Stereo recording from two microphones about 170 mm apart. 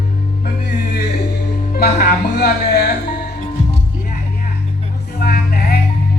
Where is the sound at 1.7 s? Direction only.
60° left (ahead or behind).